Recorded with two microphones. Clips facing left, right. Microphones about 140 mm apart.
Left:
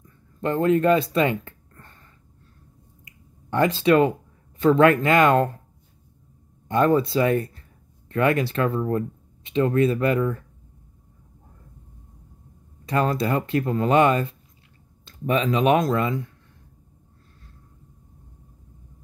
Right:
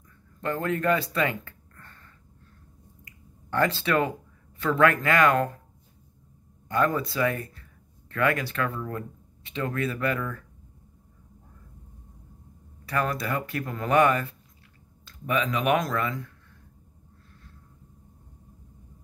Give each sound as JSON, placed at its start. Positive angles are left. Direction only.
{"t": 0.4, "sound": "speech", "side_deg": 25}
{"t": 3.1, "sound": "a sound", "side_deg": 20}
{"t": 4.6, "sound": "speech", "side_deg": 25}
{"t": 6.7, "sound": "speech", "side_deg": 25}
{"t": 12.8, "sound": "speech", "side_deg": 25}